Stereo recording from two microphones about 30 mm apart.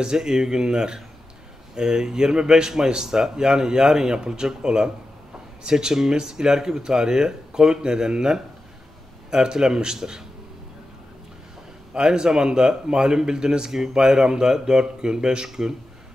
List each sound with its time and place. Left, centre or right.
0.0 s speech: right
11.9 s speech: right